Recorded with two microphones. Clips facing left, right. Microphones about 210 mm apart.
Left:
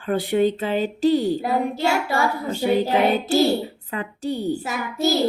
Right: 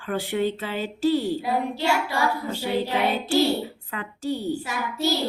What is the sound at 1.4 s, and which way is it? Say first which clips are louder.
Child singing: left 3 dB; 45° left (ahead or behind).